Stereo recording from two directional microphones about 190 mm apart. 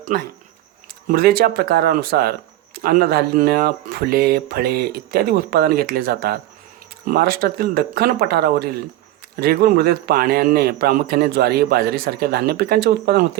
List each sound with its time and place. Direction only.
0.1 s speech: 50° right (ahead or behind)